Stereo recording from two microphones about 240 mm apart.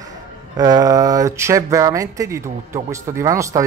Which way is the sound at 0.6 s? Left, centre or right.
Centre.